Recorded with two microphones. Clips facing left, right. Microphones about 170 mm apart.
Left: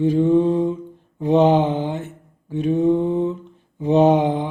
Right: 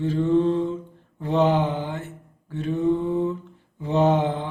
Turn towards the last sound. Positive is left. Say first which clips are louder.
# left 5 dB
turn(degrees=15)  # may be behind; listen again after turning